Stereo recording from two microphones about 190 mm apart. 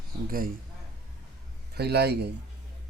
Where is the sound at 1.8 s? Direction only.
55° right (ahead or behind).